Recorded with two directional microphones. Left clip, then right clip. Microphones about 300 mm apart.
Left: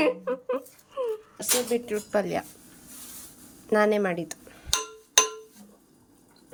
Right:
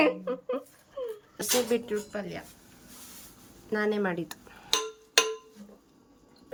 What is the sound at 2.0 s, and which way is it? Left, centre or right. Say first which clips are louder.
Speech: left 11 dB; centre.